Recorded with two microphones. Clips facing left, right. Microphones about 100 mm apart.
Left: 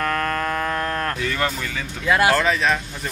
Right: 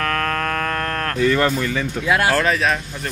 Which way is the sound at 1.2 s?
45° right (ahead or behind).